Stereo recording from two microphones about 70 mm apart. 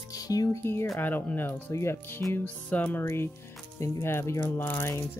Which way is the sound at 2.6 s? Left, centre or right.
Left.